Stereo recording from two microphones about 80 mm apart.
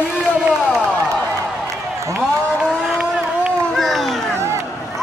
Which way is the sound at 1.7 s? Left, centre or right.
Right.